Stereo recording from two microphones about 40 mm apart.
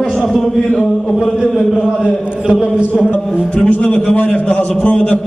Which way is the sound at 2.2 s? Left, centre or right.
Right.